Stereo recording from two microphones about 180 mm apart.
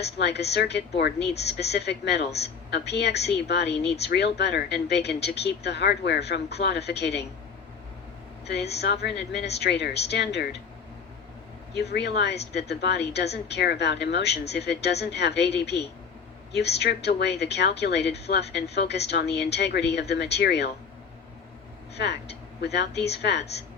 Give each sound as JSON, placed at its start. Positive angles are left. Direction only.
{"t": 0.0, "sound": "a woman's voice", "side_deg": 70}
{"t": 8.4, "sound": "a woman's voice", "side_deg": 65}
{"t": 11.8, "sound": "a woman's voice", "side_deg": 70}
{"t": 21.9, "sound": "a woman's voice", "side_deg": 70}